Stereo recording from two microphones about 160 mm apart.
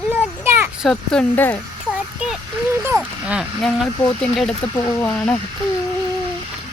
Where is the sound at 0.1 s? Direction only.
15° right (ahead or behind).